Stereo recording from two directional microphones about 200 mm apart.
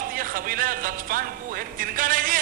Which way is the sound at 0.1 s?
45° right (ahead or behind).